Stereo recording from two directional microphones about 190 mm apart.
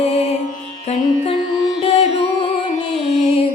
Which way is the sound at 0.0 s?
30° left (ahead or behind).